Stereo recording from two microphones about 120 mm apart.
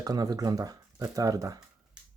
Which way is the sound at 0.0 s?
30° right (ahead or behind).